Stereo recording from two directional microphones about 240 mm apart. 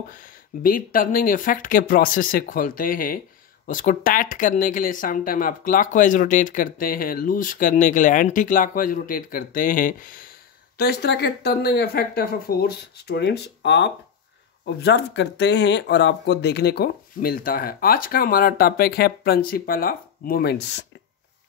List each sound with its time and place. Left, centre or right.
0.1 s speech: left